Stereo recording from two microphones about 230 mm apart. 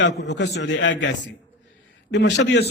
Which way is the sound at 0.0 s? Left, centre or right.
Left.